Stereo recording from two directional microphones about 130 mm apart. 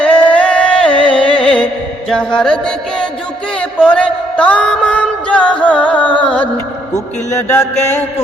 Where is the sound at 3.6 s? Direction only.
10° left (ahead or behind).